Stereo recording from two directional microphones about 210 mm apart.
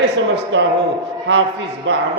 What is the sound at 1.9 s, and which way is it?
Speech, 55° right (ahead or behind).